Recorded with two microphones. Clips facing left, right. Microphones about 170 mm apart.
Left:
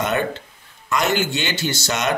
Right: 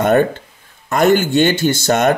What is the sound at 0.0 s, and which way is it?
Speech, 50° right (ahead or behind).